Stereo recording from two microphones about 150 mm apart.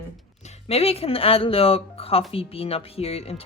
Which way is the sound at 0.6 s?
40° left (ahead or behind).